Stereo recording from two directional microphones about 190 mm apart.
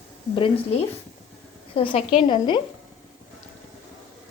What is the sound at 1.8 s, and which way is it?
Speech, 30° left (ahead or behind).